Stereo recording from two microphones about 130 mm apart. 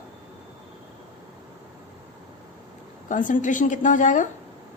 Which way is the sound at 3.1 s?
85° left.